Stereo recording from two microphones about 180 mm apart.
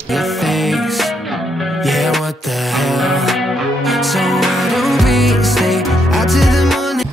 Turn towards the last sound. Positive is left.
turn(degrees=0)  # may be behind; listen again after turning